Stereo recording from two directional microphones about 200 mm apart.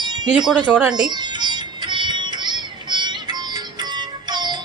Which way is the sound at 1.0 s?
20° right (ahead or behind).